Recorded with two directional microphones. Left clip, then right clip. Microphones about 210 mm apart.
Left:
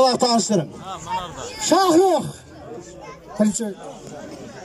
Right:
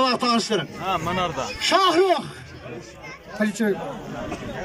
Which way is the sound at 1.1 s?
40° right (ahead or behind).